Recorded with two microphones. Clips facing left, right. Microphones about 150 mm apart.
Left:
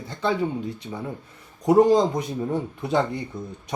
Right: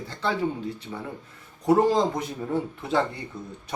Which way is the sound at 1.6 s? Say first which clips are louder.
Left 4 dB; 15° left (ahead or behind).